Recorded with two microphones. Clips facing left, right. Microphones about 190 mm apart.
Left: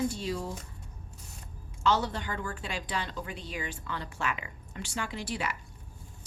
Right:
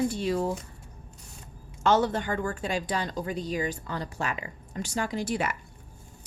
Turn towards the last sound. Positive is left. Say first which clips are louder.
# right 6 dB
turn(degrees=-45)  # may be behind; listen again after turning